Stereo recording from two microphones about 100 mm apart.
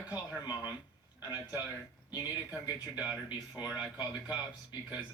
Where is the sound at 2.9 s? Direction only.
15° right (ahead or behind).